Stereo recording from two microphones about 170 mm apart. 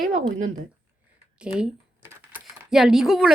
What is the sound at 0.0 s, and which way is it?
Speech, 50° right (ahead or behind).